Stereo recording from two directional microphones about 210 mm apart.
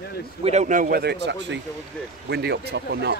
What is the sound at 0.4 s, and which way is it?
A man's voice, 30° right (ahead or behind).